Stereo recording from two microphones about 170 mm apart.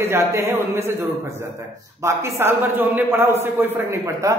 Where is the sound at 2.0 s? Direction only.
15° right (ahead or behind).